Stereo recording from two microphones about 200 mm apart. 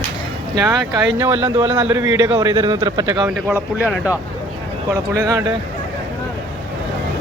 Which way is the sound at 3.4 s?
5° right (ahead or behind).